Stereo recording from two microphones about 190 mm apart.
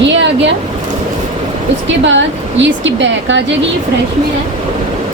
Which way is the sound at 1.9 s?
70° right (ahead or behind).